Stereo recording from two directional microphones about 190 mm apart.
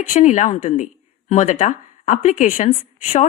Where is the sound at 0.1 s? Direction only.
40° left (ahead or behind).